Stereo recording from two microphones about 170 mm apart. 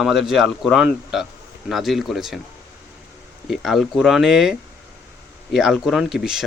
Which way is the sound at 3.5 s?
Centre (ahead or behind).